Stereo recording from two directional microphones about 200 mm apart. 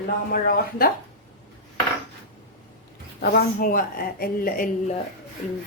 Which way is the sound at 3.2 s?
50° left (ahead or behind).